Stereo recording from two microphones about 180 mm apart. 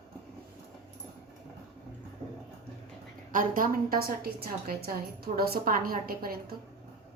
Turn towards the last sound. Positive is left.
turn(degrees=-55)  # may be behind; listen again after turning